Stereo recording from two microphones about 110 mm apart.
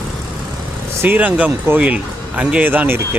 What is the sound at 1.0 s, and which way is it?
Speech, 15° right (ahead or behind).